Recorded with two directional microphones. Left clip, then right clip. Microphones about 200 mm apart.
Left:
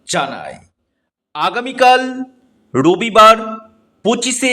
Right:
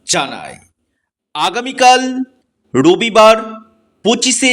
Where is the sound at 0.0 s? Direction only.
25° right (ahead or behind).